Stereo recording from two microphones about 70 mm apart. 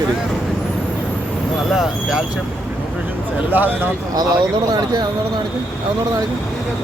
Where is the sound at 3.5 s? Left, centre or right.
Right.